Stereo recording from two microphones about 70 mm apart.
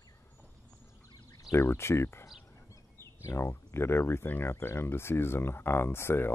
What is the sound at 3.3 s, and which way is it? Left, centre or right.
Speech, left.